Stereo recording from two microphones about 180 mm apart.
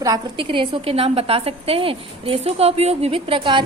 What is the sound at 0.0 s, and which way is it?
A woman's voice, 25° right (ahead or behind).